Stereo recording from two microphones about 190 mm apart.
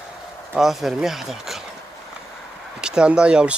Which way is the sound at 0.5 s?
Centre (ahead or behind).